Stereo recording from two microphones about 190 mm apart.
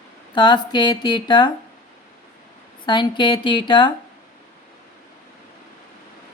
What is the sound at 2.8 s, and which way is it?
Speech, 25° left (ahead or behind).